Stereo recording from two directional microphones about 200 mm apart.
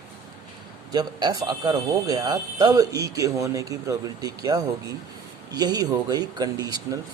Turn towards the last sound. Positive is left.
turn(degrees=-20)  # may be behind; listen again after turning